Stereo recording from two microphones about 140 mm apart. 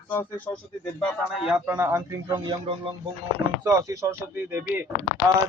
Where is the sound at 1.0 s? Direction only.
10° left (ahead or behind).